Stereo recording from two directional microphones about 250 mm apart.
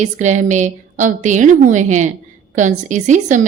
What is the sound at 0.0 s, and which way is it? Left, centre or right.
A woman's voice, right.